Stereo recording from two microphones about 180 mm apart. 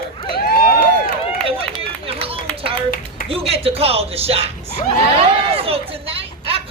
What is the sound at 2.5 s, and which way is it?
A woman's voice, 30° right (ahead or behind).